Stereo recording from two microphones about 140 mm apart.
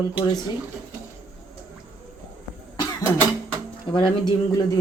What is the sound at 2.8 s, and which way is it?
Cough, 30° left (ahead or behind).